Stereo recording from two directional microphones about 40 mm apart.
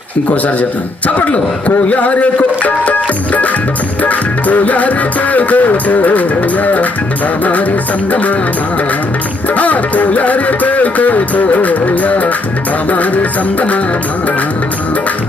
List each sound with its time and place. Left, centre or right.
1.0 s music: left
8.1 s music: left
9.6 s music: left